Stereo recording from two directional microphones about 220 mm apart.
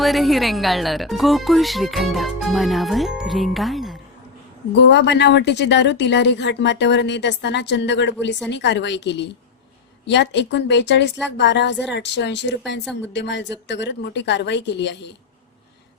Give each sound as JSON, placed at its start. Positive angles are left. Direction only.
{"t": 0.0, "sound": "speech", "side_deg": 0}
{"t": 4.7, "sound": "a woman's voice", "side_deg": 55}